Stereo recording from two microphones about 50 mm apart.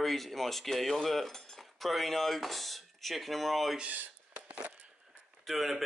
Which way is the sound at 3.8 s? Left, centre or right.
Right.